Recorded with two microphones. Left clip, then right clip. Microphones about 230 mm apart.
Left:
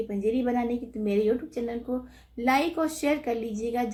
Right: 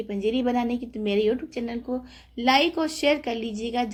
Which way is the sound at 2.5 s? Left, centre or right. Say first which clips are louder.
Right 4 dB; right.